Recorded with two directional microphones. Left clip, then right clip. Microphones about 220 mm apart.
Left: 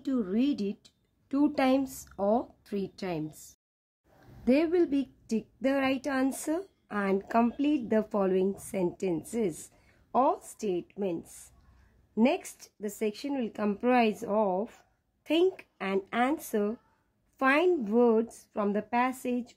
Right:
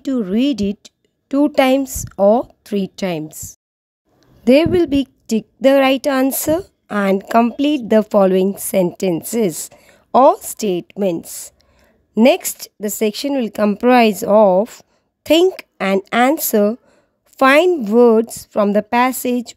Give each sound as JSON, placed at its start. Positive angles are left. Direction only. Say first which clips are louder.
{"t": 0.0, "sound": "a woman's voice", "louder": "right 12 dB", "side_deg": -35}